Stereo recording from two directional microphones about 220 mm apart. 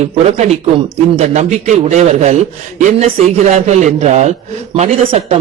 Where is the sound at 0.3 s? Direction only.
30° right (ahead or behind).